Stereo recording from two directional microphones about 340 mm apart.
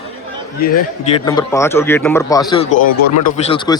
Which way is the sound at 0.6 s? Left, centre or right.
Left.